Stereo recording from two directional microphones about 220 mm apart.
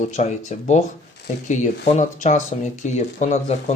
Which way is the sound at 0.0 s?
35° left (ahead or behind).